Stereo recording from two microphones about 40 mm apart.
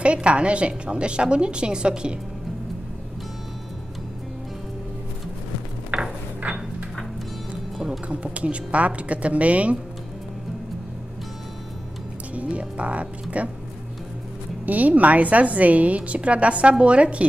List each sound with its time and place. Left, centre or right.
0.0 s a woman's voice: right
5.9 s a sound: right
6.4 s a sound: right
8.1 s a woman's voice: right
12.4 s music: right
14.7 s a woman's voice: right